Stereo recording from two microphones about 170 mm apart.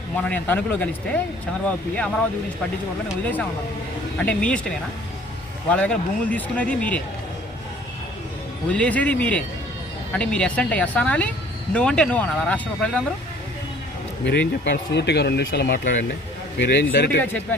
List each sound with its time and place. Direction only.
0.2 s speech: 10° left (ahead or behind)
4.2 s speech: 5° left (ahead or behind)
5.7 s speech: 5° left (ahead or behind)
8.7 s speech: 10° left (ahead or behind)
14.3 s speech: 90° left
15.8 s speech: 50° left (ahead or behind)
16.6 s speech: 85° left